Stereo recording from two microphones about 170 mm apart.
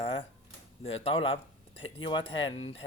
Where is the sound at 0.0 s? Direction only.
30° left (ahead or behind).